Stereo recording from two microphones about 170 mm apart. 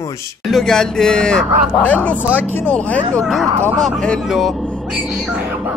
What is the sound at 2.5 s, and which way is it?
Speech, 5° left (ahead or behind).